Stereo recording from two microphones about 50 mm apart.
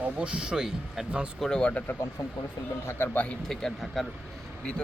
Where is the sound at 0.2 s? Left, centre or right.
Centre.